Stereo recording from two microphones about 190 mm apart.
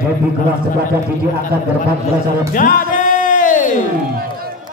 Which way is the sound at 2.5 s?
45° left (ahead or behind).